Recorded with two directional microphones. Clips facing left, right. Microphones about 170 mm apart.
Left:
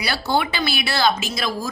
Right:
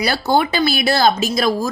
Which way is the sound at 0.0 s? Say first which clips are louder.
Right 5 dB; 45° right (ahead or behind).